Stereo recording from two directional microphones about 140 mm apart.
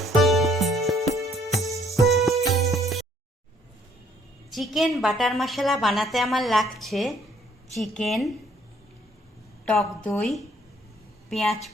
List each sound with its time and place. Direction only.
0.0 s music: centre (ahead or behind)
4.5 s a woman's voice: centre (ahead or behind)
9.6 s a woman's voice: 5° left (ahead or behind)